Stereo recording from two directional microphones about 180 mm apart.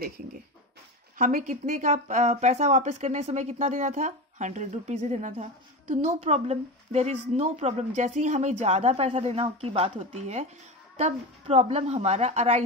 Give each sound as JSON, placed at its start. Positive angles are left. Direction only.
{"t": 1.1, "sound": "speech", "side_deg": -50}